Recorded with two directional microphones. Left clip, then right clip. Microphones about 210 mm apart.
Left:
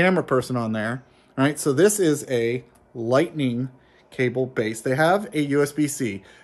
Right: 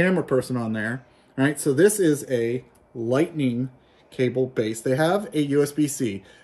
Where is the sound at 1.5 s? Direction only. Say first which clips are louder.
Right 1 dB; centre (ahead or behind).